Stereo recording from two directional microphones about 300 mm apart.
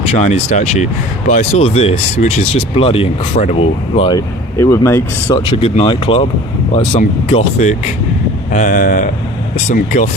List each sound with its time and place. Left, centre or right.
0.1 s speech: left